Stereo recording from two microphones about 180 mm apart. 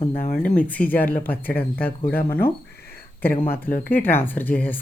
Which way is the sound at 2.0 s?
55° left (ahead or behind).